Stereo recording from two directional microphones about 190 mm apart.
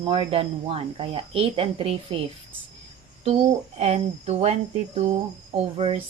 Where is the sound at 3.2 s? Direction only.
30° right (ahead or behind).